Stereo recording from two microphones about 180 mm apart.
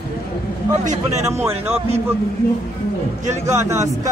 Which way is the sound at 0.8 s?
45° right (ahead or behind).